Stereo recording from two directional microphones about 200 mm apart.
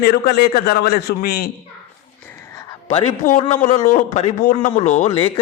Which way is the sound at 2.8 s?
30° left (ahead or behind).